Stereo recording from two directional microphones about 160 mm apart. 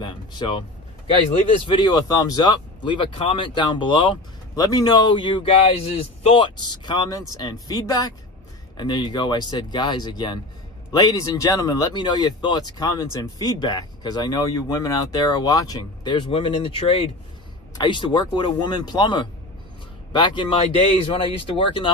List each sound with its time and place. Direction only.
0.0 s speech: 30° left (ahead or behind)
1.7 s speech: 25° left (ahead or behind)